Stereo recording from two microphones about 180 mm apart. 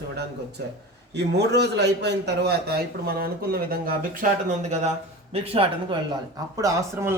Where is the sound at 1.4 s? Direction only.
70° right (ahead or behind).